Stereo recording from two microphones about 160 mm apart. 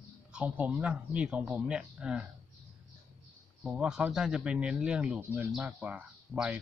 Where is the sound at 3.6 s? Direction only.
5° right (ahead or behind).